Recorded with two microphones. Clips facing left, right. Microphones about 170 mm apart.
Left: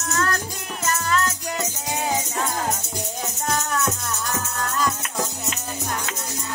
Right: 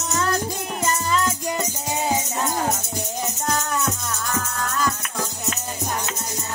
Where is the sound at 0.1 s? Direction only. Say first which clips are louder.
Right 2 dB; 15° right (ahead or behind).